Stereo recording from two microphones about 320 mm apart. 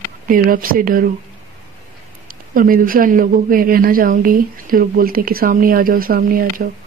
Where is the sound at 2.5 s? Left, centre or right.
Right.